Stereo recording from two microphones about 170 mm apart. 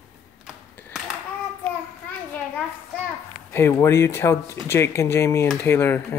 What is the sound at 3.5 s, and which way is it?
Speech, 15° left (ahead or behind).